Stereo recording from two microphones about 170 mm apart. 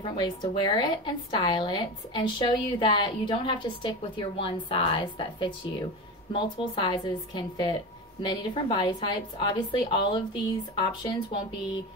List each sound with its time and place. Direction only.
0.0 s a woman's voice: 30° left (ahead or behind)